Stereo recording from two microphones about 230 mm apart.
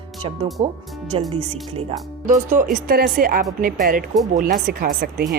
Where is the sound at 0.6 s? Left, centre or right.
Right.